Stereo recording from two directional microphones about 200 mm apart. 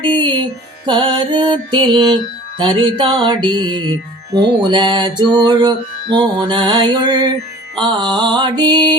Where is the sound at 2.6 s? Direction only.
25° right (ahead or behind).